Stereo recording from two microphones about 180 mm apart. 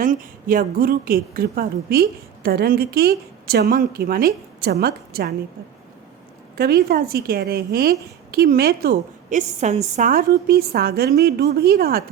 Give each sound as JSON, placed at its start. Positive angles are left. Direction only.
{"t": 0.0, "sound": "a woman's voice", "side_deg": -50}
{"t": 6.6, "sound": "a woman's voice", "side_deg": -60}
{"t": 9.6, "sound": "a woman's voice", "side_deg": -40}